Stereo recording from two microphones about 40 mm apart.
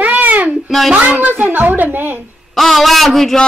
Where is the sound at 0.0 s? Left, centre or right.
Right.